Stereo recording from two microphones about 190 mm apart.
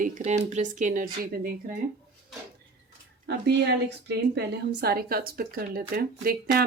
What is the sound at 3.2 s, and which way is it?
Speech, 60° right (ahead or behind).